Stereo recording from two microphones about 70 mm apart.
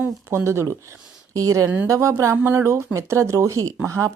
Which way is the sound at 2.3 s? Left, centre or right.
Right.